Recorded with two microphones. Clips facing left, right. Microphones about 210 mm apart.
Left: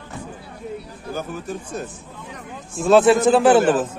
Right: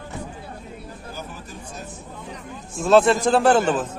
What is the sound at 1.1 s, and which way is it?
Speech, 55° left (ahead or behind).